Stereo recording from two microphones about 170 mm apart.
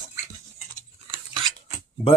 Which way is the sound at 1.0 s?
30° right (ahead or behind).